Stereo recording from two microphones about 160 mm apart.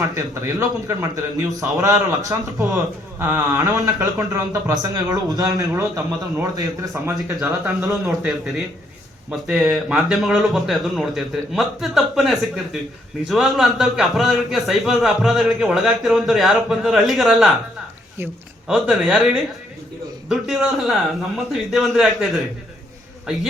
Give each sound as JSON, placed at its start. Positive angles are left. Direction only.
{"t": 0.1, "sound": "speech", "side_deg": -20}
{"t": 7.9, "sound": "a man's voice", "side_deg": 0}
{"t": 18.7, "sound": "a man's voice", "side_deg": 0}